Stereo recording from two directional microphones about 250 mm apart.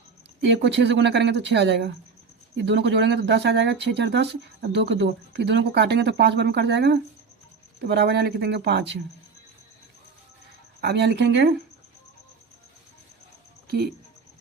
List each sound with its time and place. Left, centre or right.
0.4 s speech: right
10.8 s speech: right
13.7 s speech: right